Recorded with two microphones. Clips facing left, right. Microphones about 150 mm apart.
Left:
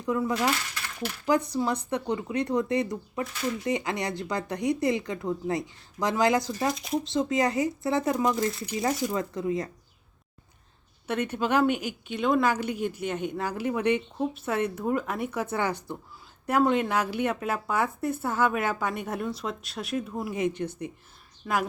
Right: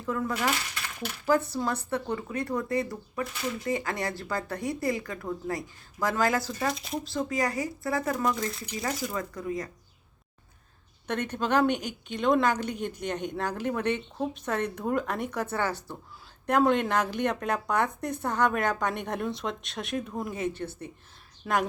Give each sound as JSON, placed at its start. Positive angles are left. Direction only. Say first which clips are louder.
{"t": 0.0, "sound": "a woman's voice", "louder": "left 3 dB", "side_deg": 15}
{"t": 6.7, "sound": "speech", "louder": "left 3 dB", "side_deg": 0}
{"t": 7.0, "sound": "speech", "louder": "left 3 dB", "side_deg": 20}
{"t": 8.2, "sound": "speech", "louder": "left 3 dB", "side_deg": 0}
{"t": 9.1, "sound": "speech", "louder": "left 4 dB", "side_deg": 25}
{"t": 11.0, "sound": "a woman's voice", "louder": "left 2 dB", "side_deg": 10}
{"t": 20.3, "sound": "a woman's voice", "louder": "left 4 dB", "side_deg": 15}
{"t": 21.4, "sound": "speech", "louder": "right 1 dB", "side_deg": 5}